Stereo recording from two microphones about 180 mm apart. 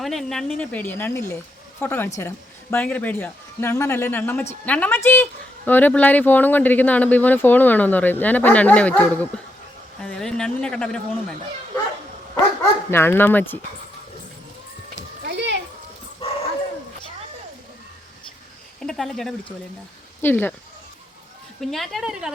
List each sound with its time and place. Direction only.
0.0 s speech: centre (ahead or behind)
12.9 s speech: 10° left (ahead or behind)
15.3 s a sound: 75° right (ahead or behind)
16.2 s dog: 30° left (ahead or behind)
18.8 s speech: 5° left (ahead or behind)
21.6 s speech: centre (ahead or behind)